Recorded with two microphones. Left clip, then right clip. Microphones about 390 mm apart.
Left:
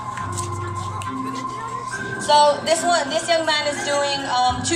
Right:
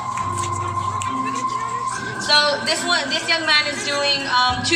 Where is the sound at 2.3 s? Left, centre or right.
Centre.